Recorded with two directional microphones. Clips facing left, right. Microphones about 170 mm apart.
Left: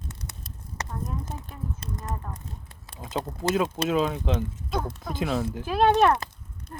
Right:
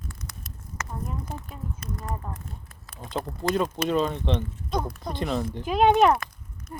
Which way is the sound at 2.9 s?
5° left (ahead or behind).